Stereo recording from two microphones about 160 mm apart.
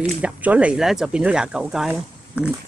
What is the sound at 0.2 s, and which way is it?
Speech, 10° right (ahead or behind).